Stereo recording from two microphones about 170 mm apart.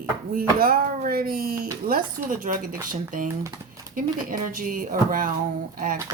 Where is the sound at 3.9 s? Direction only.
55° right (ahead or behind).